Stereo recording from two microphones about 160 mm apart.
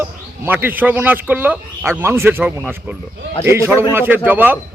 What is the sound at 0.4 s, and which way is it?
Speech, 10° right (ahead or behind).